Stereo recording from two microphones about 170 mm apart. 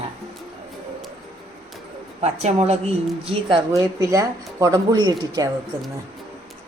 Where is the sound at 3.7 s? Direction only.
20° right (ahead or behind).